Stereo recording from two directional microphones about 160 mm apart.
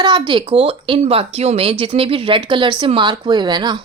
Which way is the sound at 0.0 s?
30° right (ahead or behind).